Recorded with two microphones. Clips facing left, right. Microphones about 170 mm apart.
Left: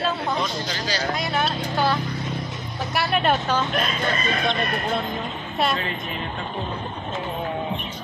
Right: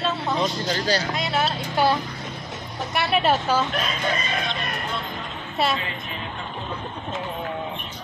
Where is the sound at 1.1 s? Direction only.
5° right (ahead or behind).